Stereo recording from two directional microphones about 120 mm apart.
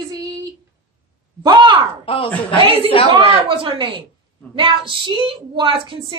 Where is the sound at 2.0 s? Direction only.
50° left (ahead or behind).